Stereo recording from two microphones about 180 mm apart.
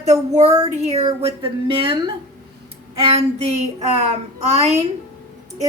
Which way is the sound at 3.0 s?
35° right (ahead or behind).